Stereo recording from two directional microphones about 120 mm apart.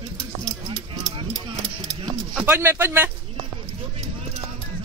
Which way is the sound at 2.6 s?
20° right (ahead or behind).